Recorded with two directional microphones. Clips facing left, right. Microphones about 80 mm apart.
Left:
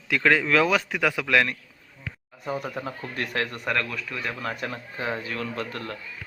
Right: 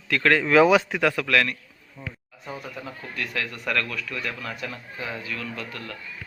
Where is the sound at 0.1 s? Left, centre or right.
Centre.